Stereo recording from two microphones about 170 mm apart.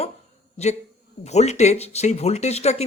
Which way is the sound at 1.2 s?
40° left (ahead or behind).